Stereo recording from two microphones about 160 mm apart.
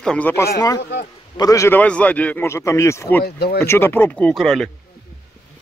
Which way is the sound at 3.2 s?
80° left.